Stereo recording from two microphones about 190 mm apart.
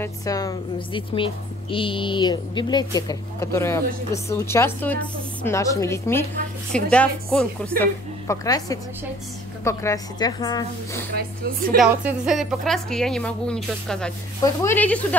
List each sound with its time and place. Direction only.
0.0 s a woman's voice: 20° left (ahead or behind)
7.8 s a woman's voice: 15° left (ahead or behind)
11.1 s speech: 50° right (ahead or behind)
11.8 s a woman's voice: 5° right (ahead or behind)